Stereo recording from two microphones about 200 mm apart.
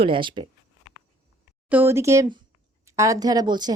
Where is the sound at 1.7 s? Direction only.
10° right (ahead or behind).